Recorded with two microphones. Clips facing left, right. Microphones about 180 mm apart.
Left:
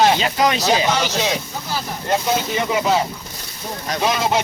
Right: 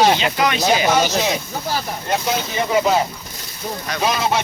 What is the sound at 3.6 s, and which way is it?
Speech, 5° right (ahead or behind).